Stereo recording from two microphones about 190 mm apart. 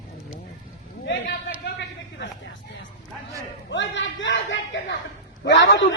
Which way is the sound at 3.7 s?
70° left (ahead or behind).